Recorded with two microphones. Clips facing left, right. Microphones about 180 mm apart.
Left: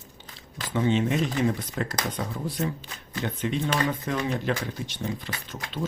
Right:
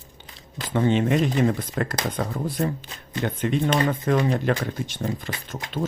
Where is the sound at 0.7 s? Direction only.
55° right (ahead or behind).